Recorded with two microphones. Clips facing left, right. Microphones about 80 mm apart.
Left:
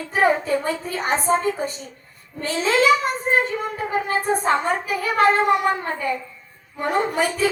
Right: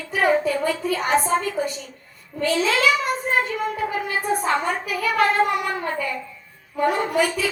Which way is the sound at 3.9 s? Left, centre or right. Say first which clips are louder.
Left 2 dB; left.